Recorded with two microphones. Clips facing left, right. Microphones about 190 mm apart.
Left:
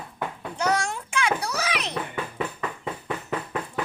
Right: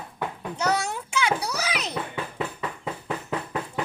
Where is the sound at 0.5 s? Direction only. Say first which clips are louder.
Left 1 dB; 5° right (ahead or behind).